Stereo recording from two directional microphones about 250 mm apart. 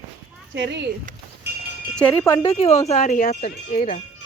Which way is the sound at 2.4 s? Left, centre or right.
Left.